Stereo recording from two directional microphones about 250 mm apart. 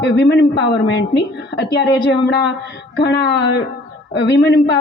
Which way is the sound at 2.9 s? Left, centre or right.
Left.